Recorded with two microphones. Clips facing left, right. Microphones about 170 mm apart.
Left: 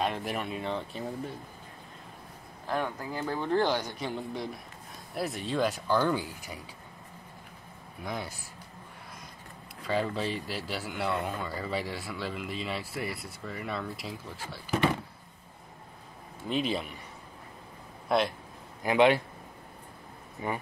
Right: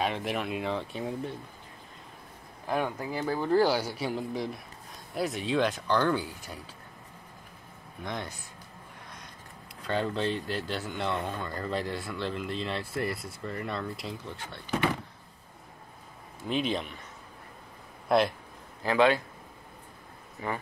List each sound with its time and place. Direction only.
0.0 s speech: centre (ahead or behind)
2.6 s speech: 10° right (ahead or behind); by 6.6 s 10° left (ahead or behind)
8.0 s speech: 5° left (ahead or behind)
9.8 s speech: 5° left (ahead or behind)
16.4 s speech: centre (ahead or behind)
18.0 s speech: centre (ahead or behind)
18.8 s a man's voice: 20° left (ahead or behind)
20.4 s speech: 20° left (ahead or behind)